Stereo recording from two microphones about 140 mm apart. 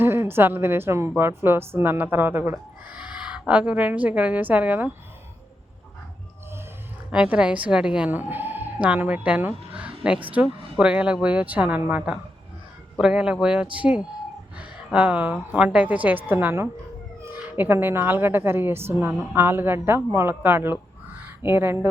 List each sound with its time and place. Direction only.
0.0 s a woman's voice: 15° right (ahead or behind)
7.1 s a woman's voice: 5° right (ahead or behind)
9.7 s a sound: 10° right (ahead or behind)
10.4 s a woman's voice: 10° right (ahead or behind)
21.2 s crow: 15° right (ahead or behind)